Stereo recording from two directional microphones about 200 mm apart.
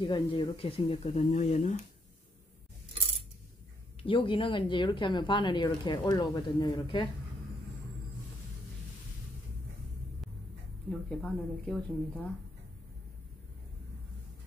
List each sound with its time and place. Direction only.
0.0 s speech: 25° left (ahead or behind)
4.0 s speech: 25° left (ahead or behind)
10.9 s speech: 5° left (ahead or behind)